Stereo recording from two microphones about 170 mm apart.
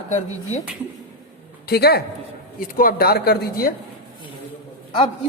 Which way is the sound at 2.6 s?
55° left (ahead or behind).